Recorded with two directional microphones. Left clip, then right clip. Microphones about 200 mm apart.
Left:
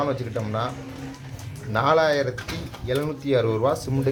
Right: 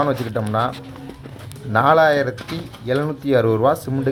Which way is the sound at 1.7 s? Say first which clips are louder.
Right 6 dB; 15° right (ahead or behind).